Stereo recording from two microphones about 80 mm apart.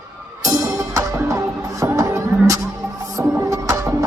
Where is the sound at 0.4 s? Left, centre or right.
Right.